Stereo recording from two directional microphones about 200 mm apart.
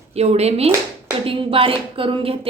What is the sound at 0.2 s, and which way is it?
A woman's voice, 30° right (ahead or behind).